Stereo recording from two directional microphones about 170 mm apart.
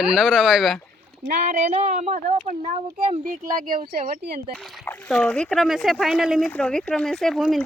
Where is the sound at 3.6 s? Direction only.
55° right (ahead or behind).